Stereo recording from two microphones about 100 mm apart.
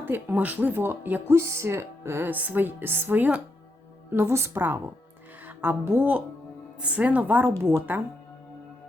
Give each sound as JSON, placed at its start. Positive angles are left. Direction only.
{"t": 0.0, "sound": "speech", "side_deg": -20}
{"t": 4.1, "sound": "a woman's voice", "side_deg": -25}